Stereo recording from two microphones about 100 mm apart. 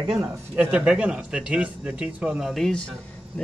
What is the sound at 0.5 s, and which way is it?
Speech, 10° right (ahead or behind).